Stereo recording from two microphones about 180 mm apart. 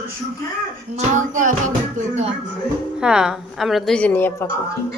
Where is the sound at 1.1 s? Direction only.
45° right (ahead or behind).